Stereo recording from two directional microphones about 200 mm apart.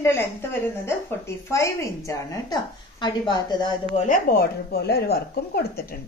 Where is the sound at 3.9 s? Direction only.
40° left (ahead or behind).